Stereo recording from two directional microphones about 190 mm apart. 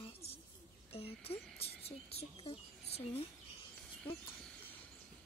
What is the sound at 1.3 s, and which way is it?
Speech, 30° left (ahead or behind).